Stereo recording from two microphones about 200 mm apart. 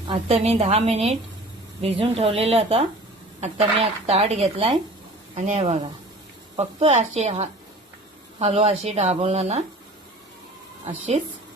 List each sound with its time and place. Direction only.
0.1 s a woman's voice: 30° right (ahead or behind)